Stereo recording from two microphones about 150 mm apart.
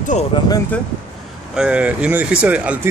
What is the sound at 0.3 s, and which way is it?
Speech, 35° left (ahead or behind).